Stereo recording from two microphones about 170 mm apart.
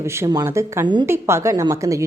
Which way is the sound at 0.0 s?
15° right (ahead or behind).